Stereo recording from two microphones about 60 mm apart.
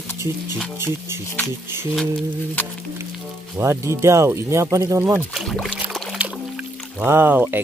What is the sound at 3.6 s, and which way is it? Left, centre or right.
Speech, right.